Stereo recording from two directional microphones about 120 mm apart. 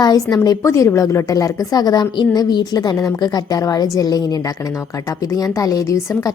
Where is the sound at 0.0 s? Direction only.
35° left (ahead or behind).